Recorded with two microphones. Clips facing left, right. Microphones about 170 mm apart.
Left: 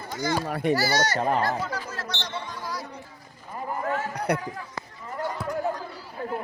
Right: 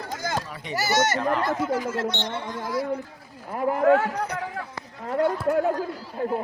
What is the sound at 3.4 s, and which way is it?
Speech, 75° right (ahead or behind).